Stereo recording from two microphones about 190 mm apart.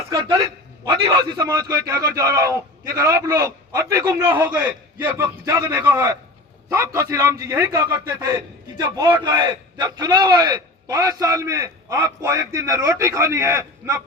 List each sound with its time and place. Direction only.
0.1 s a man's voice: 20° right (ahead or behind)